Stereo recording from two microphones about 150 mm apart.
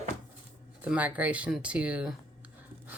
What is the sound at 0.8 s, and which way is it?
Speech, 10° right (ahead or behind).